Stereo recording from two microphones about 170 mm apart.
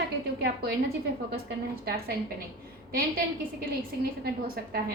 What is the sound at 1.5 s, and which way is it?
Speech, 65° right (ahead or behind).